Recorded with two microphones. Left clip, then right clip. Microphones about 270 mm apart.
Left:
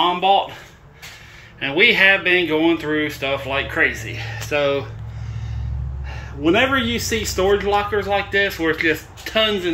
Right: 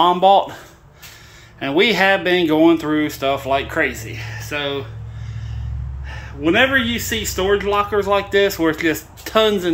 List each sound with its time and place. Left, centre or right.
0.1 s speech: right
1.6 s speech: centre
6.0 s speech: centre